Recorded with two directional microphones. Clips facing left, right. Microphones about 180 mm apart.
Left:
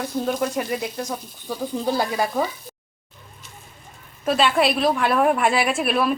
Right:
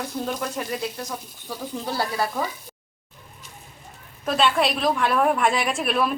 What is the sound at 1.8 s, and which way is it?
Speech, 15° left (ahead or behind).